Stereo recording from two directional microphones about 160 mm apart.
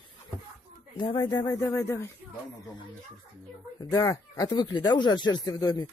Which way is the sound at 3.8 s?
20° left (ahead or behind).